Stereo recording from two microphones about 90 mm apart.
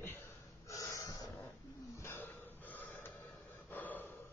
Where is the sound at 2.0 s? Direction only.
30° left (ahead or behind).